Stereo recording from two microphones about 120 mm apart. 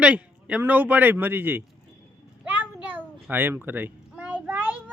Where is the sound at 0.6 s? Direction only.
15° right (ahead or behind).